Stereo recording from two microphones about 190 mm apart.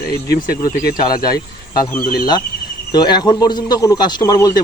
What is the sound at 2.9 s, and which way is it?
Speech, 20° left (ahead or behind).